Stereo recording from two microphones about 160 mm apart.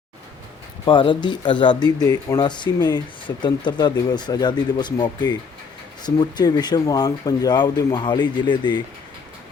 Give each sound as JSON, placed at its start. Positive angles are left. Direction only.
{"t": 0.9, "sound": "speech", "side_deg": 30}